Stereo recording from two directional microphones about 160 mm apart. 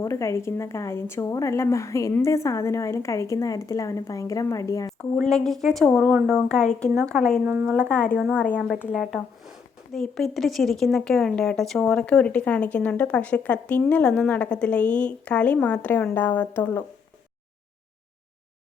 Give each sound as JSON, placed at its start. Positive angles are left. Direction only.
{"t": 0.0, "sound": "a woman's voice", "side_deg": 15}
{"t": 4.9, "sound": "a woman's voice", "side_deg": 0}
{"t": 7.4, "sound": "speech", "side_deg": -15}
{"t": 7.7, "sound": "speech", "side_deg": 5}